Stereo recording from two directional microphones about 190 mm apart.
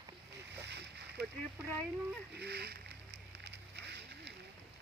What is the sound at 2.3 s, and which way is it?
Speech, 60° right (ahead or behind).